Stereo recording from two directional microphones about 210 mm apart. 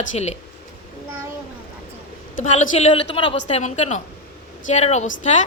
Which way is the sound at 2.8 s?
30° left (ahead or behind).